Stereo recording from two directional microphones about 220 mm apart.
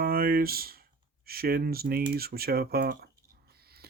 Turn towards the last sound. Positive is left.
turn(degrees=-45)  # may be behind; listen again after turning